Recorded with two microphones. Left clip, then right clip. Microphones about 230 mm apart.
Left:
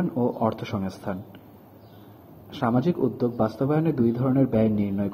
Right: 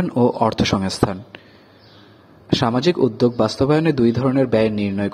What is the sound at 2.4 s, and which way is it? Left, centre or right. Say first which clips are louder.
Speech: right 7 dB; right.